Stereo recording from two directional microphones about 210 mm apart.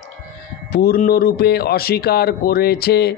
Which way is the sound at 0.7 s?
45° left (ahead or behind).